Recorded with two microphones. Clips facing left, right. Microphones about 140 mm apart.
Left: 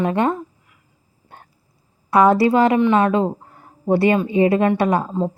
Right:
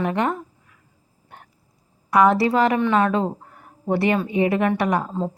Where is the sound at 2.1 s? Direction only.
25° left (ahead or behind).